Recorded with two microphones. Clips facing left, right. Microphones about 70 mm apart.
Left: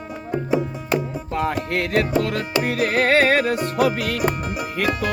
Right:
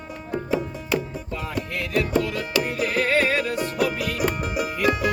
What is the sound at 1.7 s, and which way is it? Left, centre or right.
Music, left.